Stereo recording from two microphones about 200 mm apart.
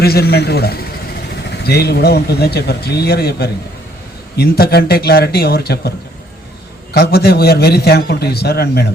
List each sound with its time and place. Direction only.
0.0 s a man's voice: 50° left (ahead or behind)
6.9 s a man's voice: 50° left (ahead or behind)